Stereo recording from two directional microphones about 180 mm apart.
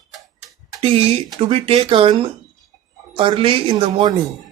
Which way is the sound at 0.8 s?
30° right (ahead or behind).